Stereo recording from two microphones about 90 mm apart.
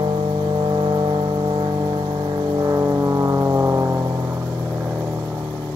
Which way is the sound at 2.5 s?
40° right (ahead or behind).